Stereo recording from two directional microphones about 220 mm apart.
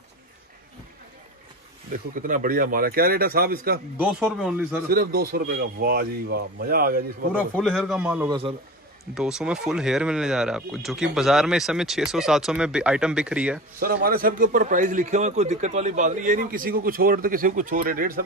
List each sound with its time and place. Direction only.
1.9 s a man's voice: 35° right (ahead or behind)
4.0 s speech: 5° right (ahead or behind)
4.8 s a man's voice: 45° right (ahead or behind)
7.3 s speech: 5° left (ahead or behind)
13.7 s a man's voice: 40° right (ahead or behind)